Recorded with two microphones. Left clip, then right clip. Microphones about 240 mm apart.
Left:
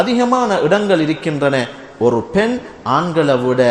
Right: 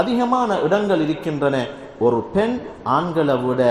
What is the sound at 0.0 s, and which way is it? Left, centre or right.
A man's voice, left.